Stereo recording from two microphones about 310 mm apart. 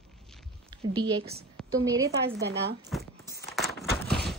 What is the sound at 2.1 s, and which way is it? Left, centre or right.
Speech, right.